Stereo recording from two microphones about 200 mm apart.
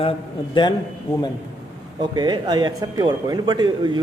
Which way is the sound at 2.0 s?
20° right (ahead or behind).